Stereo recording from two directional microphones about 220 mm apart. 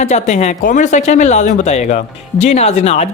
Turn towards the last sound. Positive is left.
turn(degrees=30)  # may be behind; listen again after turning